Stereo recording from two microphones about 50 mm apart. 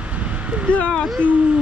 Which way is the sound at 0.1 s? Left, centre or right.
Right.